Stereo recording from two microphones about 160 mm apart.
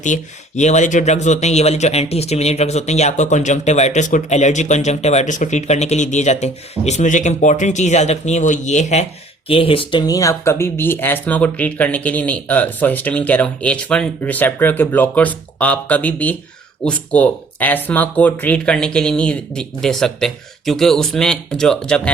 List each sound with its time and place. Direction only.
0.0 s speech: 50° left (ahead or behind)
9.5 s speech: 35° left (ahead or behind); by 22.1 s 5° left (ahead or behind)